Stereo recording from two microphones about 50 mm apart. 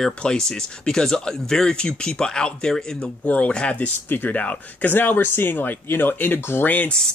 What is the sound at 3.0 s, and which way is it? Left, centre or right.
Speech, left.